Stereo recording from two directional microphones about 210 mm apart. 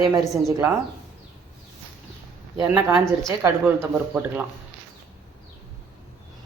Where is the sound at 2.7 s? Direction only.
10° right (ahead or behind).